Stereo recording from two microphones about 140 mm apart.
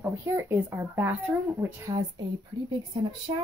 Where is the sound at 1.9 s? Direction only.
45° right (ahead or behind).